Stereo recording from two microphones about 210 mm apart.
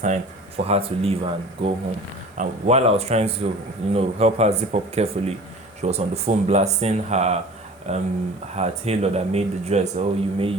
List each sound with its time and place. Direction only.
0.0 s speech: 30° right (ahead or behind)